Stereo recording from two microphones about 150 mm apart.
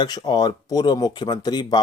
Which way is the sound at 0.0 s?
25° left (ahead or behind).